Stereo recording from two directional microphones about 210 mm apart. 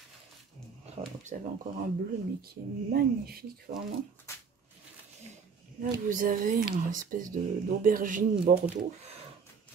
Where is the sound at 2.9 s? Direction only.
45° right (ahead or behind).